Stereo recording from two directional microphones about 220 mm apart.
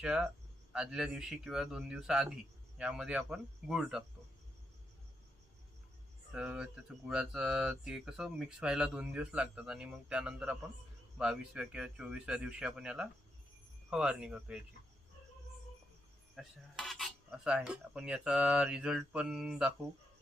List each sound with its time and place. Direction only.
0.0 s speech: 5° right (ahead or behind)
6.3 s speech: centre (ahead or behind)
16.3 s speech: centre (ahead or behind)